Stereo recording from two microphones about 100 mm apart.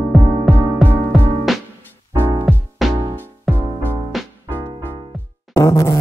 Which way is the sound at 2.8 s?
Centre (ahead or behind).